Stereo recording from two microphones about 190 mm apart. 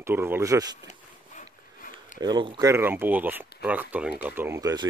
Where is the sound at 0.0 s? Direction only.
10° right (ahead or behind).